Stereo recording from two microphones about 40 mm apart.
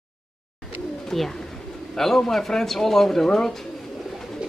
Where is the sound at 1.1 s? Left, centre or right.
Centre.